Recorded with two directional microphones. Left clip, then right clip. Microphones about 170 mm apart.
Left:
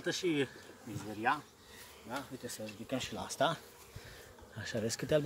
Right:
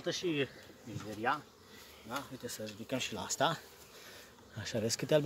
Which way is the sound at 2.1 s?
40° right (ahead or behind).